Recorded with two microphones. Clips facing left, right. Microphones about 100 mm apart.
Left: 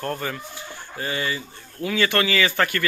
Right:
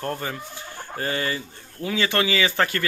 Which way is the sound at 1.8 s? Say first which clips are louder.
Left 1 dB; 25° right (ahead or behind).